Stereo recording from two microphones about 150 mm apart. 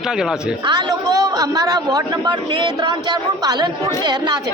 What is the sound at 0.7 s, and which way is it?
A man's voice, 30° right (ahead or behind).